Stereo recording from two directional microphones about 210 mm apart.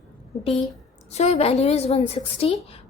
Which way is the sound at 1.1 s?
30° left (ahead or behind).